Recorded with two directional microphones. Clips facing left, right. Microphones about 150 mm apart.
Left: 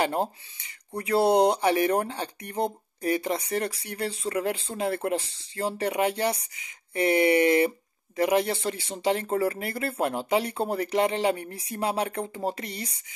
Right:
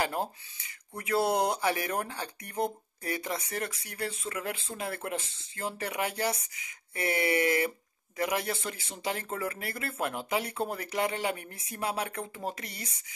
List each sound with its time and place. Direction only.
0.0 s speech: 25° left (ahead or behind)